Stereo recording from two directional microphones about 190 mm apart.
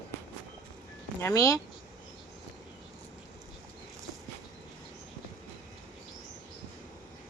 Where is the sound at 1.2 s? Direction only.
15° left (ahead or behind).